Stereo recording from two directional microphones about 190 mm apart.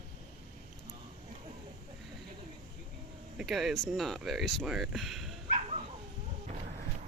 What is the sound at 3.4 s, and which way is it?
Speech, centre (ahead or behind).